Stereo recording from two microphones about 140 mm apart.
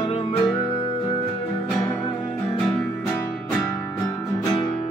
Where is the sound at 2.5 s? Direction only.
15° left (ahead or behind).